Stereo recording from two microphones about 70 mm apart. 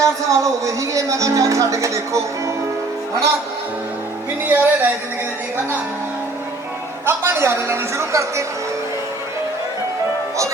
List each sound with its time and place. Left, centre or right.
0.0 s speech: right
4.4 s speech: right
7.0 s a man's voice: right